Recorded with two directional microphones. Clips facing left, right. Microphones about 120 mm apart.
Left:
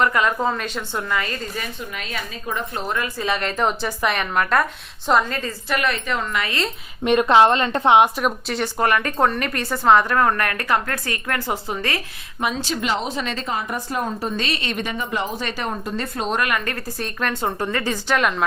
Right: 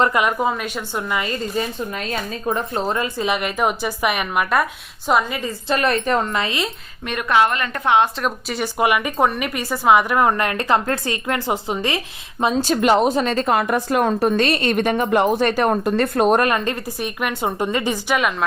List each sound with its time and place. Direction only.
0.0 s a woman's voice: 20° right (ahead or behind)
2.0 s a woman's voice: 40° right (ahead or behind); by 5.5 s 15° right (ahead or behind)
5.6 s a woman's voice: 35° right (ahead or behind)
6.4 s a woman's voice: 20° right (ahead or behind)
7.0 s a woman's voice: 25° left (ahead or behind)
8.2 s a woman's voice: 5° right (ahead or behind); by 12.5 s 25° right (ahead or behind)
12.5 s a woman's voice: 50° right (ahead or behind)
16.4 s a woman's voice: 30° right (ahead or behind)
16.7 s a woman's voice: 15° right (ahead or behind)
18.2 s a woman's voice: 5° right (ahead or behind)